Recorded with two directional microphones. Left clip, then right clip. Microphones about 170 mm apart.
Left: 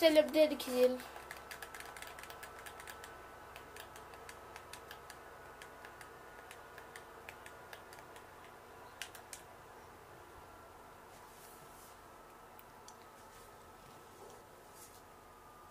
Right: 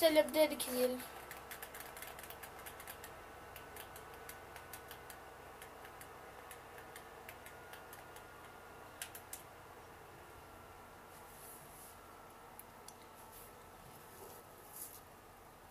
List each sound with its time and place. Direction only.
0.0 s speech: 25° left (ahead or behind)